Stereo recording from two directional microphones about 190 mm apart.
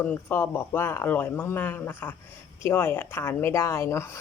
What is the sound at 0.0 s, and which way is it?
A woman's voice, 10° left (ahead or behind).